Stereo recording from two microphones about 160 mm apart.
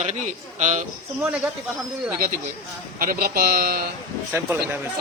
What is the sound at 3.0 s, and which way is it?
Speech, 60° right (ahead or behind).